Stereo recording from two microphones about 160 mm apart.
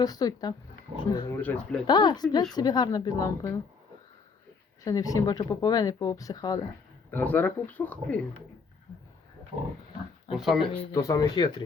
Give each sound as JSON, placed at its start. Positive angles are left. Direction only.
{"t": 0.0, "sound": "speech", "side_deg": 25}
{"t": 0.9, "sound": "speech", "side_deg": -35}
{"t": 1.3, "sound": "speech", "side_deg": 10}
{"t": 1.9, "sound": "speech", "side_deg": 25}
{"t": 4.8, "sound": "speech", "side_deg": 20}
{"t": 7.1, "sound": "speech", "side_deg": 10}
{"t": 10.3, "sound": "speech", "side_deg": 0}
{"t": 10.9, "sound": "speech", "side_deg": 20}